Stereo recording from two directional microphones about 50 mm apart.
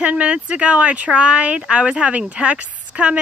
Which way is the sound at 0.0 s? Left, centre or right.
Right.